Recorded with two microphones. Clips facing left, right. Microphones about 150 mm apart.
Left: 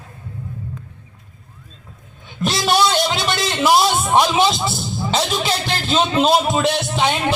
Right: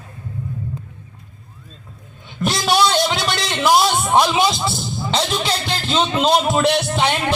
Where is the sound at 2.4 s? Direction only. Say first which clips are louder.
Even; centre (ahead or behind).